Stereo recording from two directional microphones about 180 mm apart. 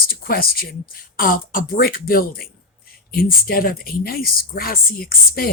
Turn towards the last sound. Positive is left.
turn(degrees=55)  # may be behind; listen again after turning